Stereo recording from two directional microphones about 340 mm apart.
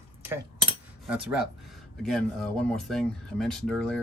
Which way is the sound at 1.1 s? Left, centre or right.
Centre.